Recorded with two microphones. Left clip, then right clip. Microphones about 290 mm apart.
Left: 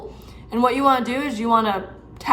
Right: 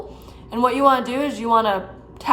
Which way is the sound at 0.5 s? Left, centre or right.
Centre.